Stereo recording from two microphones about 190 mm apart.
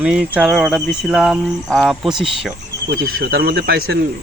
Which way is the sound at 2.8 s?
55° right (ahead or behind).